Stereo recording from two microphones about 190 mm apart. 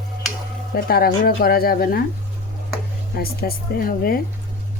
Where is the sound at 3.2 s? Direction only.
50° left (ahead or behind).